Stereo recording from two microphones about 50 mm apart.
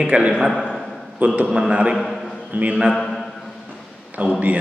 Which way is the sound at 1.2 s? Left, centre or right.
Right.